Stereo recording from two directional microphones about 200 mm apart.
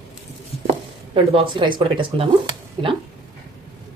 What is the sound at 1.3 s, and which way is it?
Speech, 25° right (ahead or behind).